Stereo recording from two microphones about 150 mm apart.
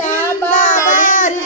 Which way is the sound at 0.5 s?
65° left (ahead or behind).